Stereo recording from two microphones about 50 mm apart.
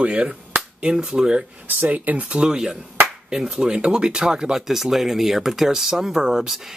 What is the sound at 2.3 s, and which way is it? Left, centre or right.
Speech, centre.